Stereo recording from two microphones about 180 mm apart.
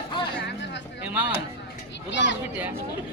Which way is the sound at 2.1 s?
85° left.